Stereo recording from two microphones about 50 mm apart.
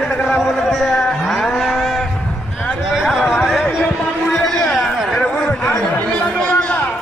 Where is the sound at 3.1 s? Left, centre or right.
Centre.